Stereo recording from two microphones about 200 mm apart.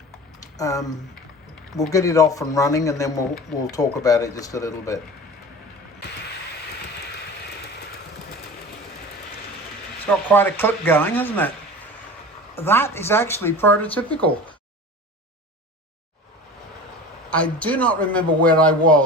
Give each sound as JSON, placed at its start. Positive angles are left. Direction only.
{"t": 0.3, "sound": "typing", "side_deg": 15}
{"t": 1.9, "sound": "a man's voice", "side_deg": 15}
{"t": 10.1, "sound": "a man's voice", "side_deg": 10}
{"t": 12.5, "sound": "a man's voice", "side_deg": 10}
{"t": 17.2, "sound": "a man's voice", "side_deg": 5}